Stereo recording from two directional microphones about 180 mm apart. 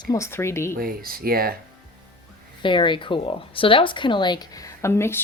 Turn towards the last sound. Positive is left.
turn(degrees=15)  # may be behind; listen again after turning